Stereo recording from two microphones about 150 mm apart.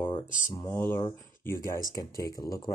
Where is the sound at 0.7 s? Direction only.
15° left (ahead or behind).